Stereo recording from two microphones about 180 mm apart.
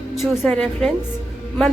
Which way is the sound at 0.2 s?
Centre (ahead or behind).